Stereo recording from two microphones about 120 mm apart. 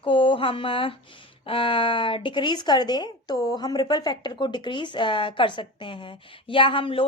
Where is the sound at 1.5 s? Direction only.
45° left (ahead or behind).